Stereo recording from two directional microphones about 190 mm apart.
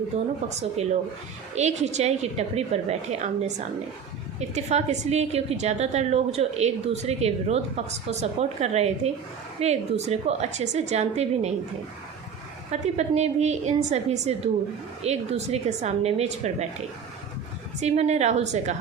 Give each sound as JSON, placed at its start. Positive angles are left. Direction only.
{"t": 0.1, "sound": "a woman's voice", "side_deg": -35}
{"t": 12.7, "sound": "a woman's voice", "side_deg": -35}
{"t": 17.7, "sound": "a woman's voice", "side_deg": -35}